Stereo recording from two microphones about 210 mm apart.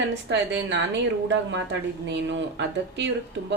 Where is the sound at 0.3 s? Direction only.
60° right (ahead or behind).